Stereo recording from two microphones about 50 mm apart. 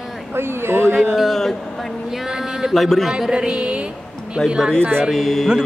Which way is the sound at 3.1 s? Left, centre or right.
Centre.